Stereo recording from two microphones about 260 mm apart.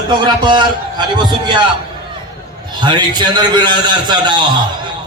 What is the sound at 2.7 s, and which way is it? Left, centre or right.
A man's voice, centre.